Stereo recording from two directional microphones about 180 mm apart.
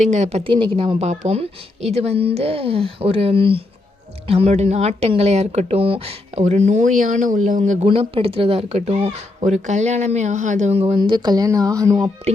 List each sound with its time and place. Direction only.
0.0 s speech: 40° right (ahead or behind); by 12.1 s 20° right (ahead or behind)